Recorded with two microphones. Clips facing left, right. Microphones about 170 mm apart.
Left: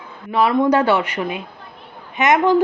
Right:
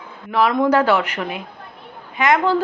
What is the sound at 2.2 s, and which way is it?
Speech, 20° left (ahead or behind).